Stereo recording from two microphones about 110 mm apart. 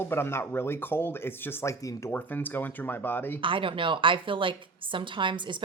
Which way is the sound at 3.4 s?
50° right (ahead or behind).